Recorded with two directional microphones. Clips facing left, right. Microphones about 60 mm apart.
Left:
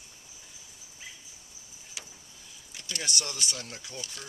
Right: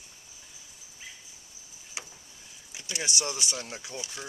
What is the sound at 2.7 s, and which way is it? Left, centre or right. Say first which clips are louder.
Speech: right 1 dB; centre.